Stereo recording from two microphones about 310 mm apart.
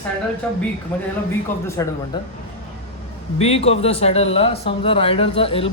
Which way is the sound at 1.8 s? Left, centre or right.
Centre.